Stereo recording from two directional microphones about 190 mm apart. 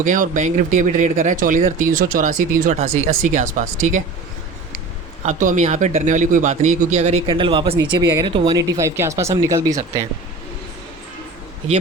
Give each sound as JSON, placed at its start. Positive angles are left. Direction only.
{"t": 0.0, "sound": "speech", "side_deg": -40}
{"t": 5.2, "sound": "speech", "side_deg": -40}